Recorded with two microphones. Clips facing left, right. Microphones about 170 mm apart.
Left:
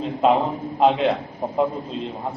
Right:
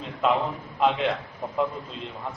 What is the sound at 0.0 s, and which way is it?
A man's voice, 35° left (ahead or behind).